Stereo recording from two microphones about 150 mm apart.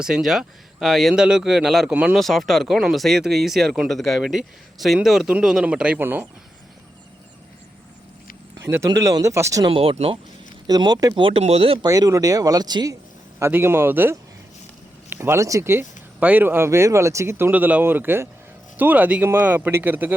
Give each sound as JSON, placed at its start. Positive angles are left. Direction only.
{"t": 0.0, "sound": "speech", "side_deg": -5}
{"t": 8.5, "sound": "speech", "side_deg": -20}
{"t": 9.6, "sound": "speech", "side_deg": -40}
{"t": 10.7, "sound": "speech", "side_deg": -25}
{"t": 11.9, "sound": "speech", "side_deg": -20}
{"t": 13.4, "sound": "speech", "side_deg": -15}